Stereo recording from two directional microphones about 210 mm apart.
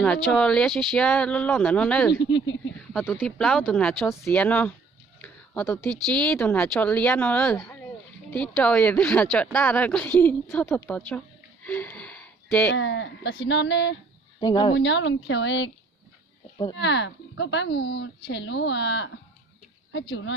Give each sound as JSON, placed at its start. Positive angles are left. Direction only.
{"t": 0.0, "sound": "speech", "side_deg": 5}
{"t": 2.1, "sound": "speech", "side_deg": 60}
{"t": 2.9, "sound": "a woman's voice", "side_deg": 0}
{"t": 5.2, "sound": "a sound", "side_deg": 10}
{"t": 6.1, "sound": "a woman's voice", "side_deg": 5}
{"t": 11.6, "sound": "a sound", "side_deg": 10}
{"t": 12.6, "sound": "speech", "side_deg": 60}
{"t": 14.4, "sound": "speech", "side_deg": 20}
{"t": 14.8, "sound": "speech", "side_deg": 55}
{"t": 16.8, "sound": "speech", "side_deg": 60}